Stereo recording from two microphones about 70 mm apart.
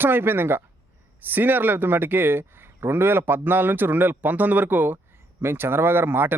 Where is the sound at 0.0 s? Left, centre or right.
Right.